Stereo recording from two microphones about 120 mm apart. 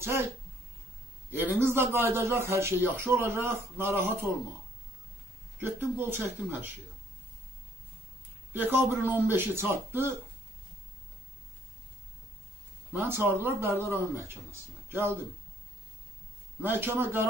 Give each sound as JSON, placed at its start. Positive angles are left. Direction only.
{"t": 0.0, "sound": "speech", "side_deg": -20}
{"t": 1.3, "sound": "speech", "side_deg": -20}
{"t": 5.6, "sound": "speech", "side_deg": -20}
{"t": 8.5, "sound": "speech", "side_deg": -15}
{"t": 12.9, "sound": "speech", "side_deg": -15}
{"t": 16.6, "sound": "speech", "side_deg": -15}